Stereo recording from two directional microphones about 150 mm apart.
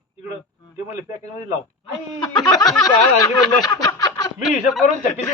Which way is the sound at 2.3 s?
30° left (ahead or behind).